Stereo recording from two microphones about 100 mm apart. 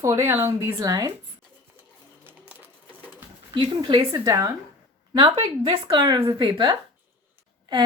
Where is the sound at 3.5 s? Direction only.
50° right (ahead or behind).